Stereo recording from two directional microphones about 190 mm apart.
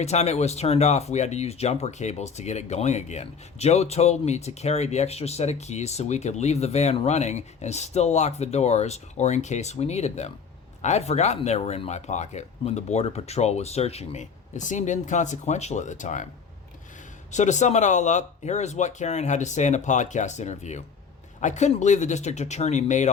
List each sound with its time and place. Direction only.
0.0 s speech: 35° left (ahead or behind)
17.3 s speech: 40° left (ahead or behind)